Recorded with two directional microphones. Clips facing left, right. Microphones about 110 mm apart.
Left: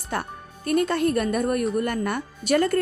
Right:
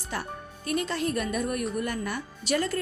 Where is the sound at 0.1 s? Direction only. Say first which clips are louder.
Left 5 dB; 50° left (ahead or behind).